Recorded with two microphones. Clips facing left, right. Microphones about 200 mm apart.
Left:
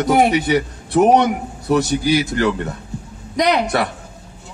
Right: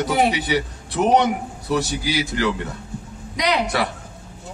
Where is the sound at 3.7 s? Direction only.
50° left (ahead or behind).